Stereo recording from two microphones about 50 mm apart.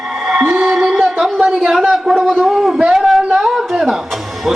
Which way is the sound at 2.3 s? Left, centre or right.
Centre.